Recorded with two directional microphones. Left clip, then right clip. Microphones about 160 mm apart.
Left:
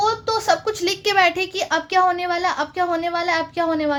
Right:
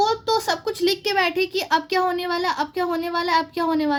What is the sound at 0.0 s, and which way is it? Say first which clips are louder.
A child's voice: even; 30° right (ahead or behind).